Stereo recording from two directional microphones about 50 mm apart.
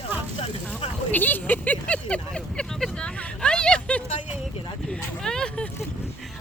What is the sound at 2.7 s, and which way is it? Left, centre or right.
Speech, centre.